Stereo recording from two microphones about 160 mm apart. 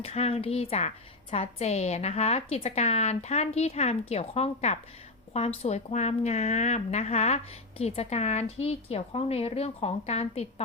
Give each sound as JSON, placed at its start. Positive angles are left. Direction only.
{"t": 0.0, "sound": "a woman's voice", "side_deg": 40}